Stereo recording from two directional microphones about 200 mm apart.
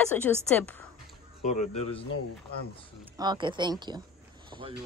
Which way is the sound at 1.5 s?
35° left (ahead or behind).